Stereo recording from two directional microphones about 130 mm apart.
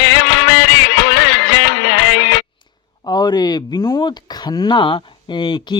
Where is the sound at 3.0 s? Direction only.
30° left (ahead or behind).